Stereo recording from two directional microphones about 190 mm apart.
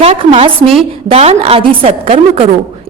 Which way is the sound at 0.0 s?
30° right (ahead or behind).